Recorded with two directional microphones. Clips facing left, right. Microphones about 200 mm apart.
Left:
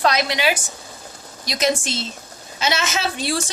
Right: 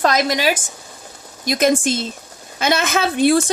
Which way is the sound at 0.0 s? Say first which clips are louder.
Right 3 dB; 45° right (ahead or behind).